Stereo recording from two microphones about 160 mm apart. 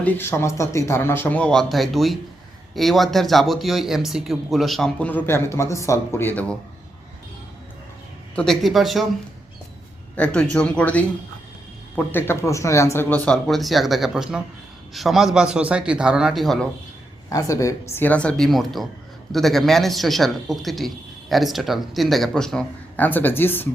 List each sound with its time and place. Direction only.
0.0 s speech: 10° left (ahead or behind)
8.4 s speech: centre (ahead or behind)
10.2 s speech: 5° left (ahead or behind)
17.2 s speech: 20° left (ahead or behind)